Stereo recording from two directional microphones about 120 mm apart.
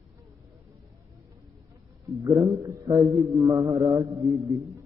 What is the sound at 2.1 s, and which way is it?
A man's voice, 30° right (ahead or behind).